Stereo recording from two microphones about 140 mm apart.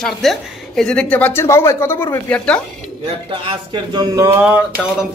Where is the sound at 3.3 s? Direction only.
35° right (ahead or behind).